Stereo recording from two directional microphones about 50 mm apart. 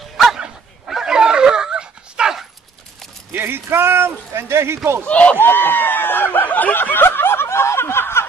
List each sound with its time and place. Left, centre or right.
0.8 s dog: centre
3.3 s speech: right
5.0 s speech: left
5.4 s snicker: left